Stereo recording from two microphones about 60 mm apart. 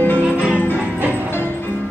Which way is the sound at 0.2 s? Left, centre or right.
Right.